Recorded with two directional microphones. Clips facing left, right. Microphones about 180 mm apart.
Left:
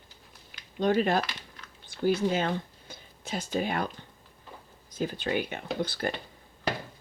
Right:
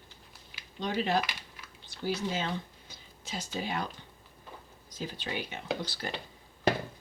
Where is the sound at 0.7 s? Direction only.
50° left (ahead or behind).